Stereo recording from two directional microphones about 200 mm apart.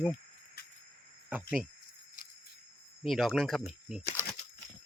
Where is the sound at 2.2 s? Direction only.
45° left (ahead or behind).